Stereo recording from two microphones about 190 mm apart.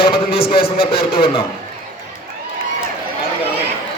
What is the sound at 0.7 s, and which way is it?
Speech, 55° left (ahead or behind).